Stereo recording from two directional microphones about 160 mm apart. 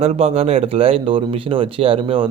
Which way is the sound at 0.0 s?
40° right (ahead or behind).